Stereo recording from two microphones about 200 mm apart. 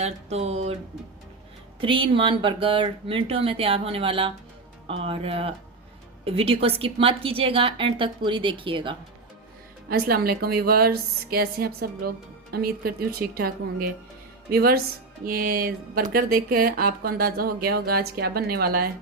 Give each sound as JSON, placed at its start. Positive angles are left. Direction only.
{"t": 0.0, "sound": "speech", "side_deg": -30}
{"t": 1.8, "sound": "a woman's voice", "side_deg": -25}
{"t": 9.9, "sound": "speech", "side_deg": -50}